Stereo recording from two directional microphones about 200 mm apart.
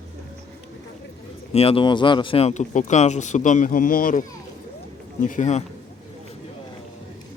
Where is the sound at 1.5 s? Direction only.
30° left (ahead or behind).